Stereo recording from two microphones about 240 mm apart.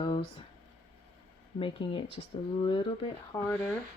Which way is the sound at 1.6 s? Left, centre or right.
Left.